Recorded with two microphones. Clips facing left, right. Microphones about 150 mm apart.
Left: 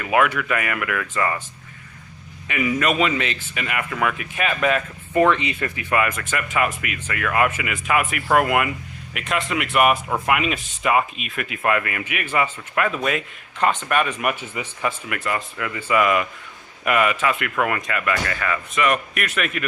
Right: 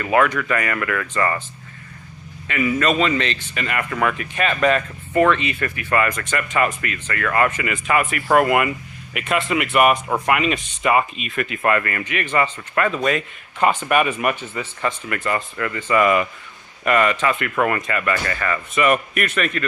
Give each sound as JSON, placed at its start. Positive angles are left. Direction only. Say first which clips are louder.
{"t": 0.0, "sound": "speech", "louder": "right 2 dB", "side_deg": 5}
{"t": 2.5, "sound": "speech", "louder": "right 2 dB", "side_deg": 15}
{"t": 5.1, "sound": "speech", "louder": "right 1 dB", "side_deg": 20}
{"t": 6.0, "sound": "speech", "louder": "right 2 dB", "side_deg": 5}
{"t": 13.6, "sound": "speech", "louder": "right 3 dB", "side_deg": -10}
{"t": 14.4, "sound": "speech", "louder": "right 1 dB", "side_deg": 10}